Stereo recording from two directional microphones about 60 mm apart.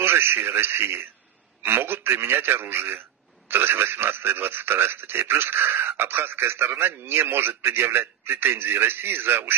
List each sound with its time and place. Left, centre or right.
0.0 s a man's voice: right